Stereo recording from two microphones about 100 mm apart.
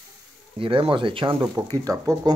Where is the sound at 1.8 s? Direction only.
40° right (ahead or behind).